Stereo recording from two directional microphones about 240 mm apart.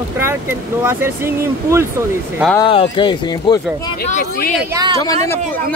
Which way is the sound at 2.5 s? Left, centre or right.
Left.